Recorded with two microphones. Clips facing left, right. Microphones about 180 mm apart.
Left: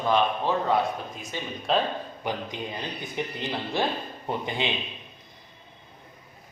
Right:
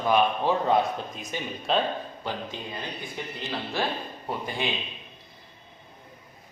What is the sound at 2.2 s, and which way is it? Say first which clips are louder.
Speech: left 2 dB; 15° left (ahead or behind).